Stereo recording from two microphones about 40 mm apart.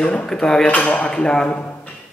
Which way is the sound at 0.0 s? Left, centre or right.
Left.